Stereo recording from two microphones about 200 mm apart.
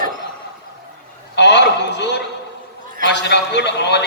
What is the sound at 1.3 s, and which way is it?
A man's voice, 60° left (ahead or behind).